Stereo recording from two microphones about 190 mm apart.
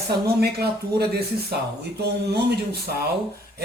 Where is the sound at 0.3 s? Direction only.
55° right (ahead or behind).